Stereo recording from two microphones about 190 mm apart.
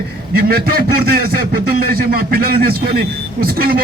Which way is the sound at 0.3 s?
50° right (ahead or behind).